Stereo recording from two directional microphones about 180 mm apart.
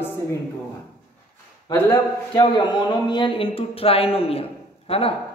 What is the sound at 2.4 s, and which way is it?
Speech, 25° left (ahead or behind).